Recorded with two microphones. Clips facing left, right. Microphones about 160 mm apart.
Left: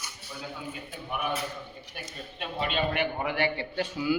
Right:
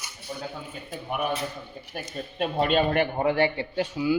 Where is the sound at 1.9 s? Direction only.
45° right (ahead or behind); by 3.6 s 30° right (ahead or behind).